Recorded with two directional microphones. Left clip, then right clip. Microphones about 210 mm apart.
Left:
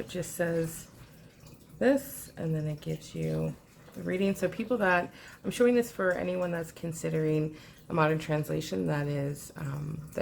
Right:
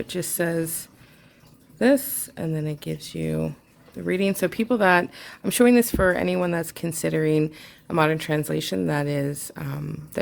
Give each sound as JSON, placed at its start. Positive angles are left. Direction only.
{"t": 0.1, "sound": "speech", "side_deg": -45}
{"t": 1.8, "sound": "speech", "side_deg": -45}